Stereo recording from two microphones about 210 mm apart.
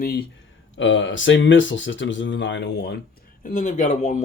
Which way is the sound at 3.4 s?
35° left (ahead or behind).